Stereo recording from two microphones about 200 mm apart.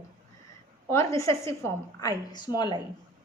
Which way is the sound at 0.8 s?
15° left (ahead or behind).